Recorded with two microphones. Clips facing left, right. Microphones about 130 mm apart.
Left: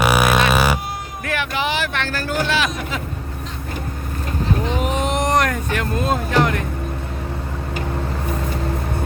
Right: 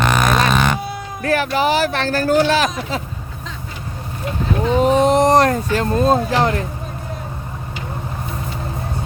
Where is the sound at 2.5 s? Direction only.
40° right (ahead or behind).